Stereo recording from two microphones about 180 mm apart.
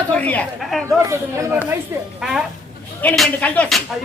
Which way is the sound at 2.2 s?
5° right (ahead or behind).